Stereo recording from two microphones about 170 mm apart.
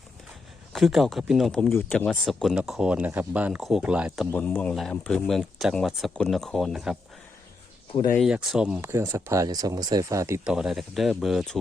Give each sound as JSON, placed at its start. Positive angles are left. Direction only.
{"t": 0.7, "sound": "speech", "side_deg": 0}
{"t": 4.3, "sound": "speech", "side_deg": 10}
{"t": 8.1, "sound": "speech", "side_deg": 0}
{"t": 8.8, "sound": "speech", "side_deg": -15}
{"t": 10.4, "sound": "speech", "side_deg": -5}